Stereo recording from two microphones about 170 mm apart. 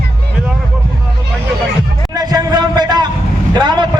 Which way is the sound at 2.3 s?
25° right (ahead or behind).